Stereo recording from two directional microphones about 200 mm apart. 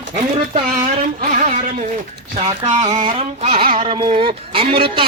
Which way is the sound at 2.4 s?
20° right (ahead or behind).